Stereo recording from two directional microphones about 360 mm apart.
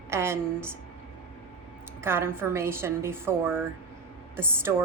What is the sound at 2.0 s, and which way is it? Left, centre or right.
A woman's voice, centre.